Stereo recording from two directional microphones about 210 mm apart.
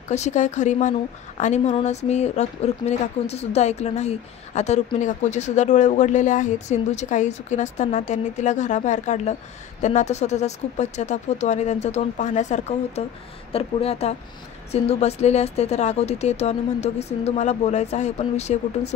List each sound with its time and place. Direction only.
0.1 s speech: 35° left (ahead or behind)